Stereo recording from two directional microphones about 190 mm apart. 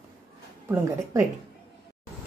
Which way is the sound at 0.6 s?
15° right (ahead or behind).